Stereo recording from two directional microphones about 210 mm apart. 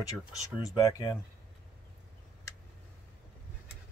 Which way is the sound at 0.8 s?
15° left (ahead or behind).